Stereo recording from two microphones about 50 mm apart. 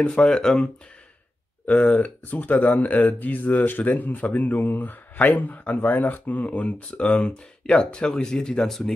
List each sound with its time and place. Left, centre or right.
0.0 s speech: centre
1.7 s speech: left; by 8.9 s centre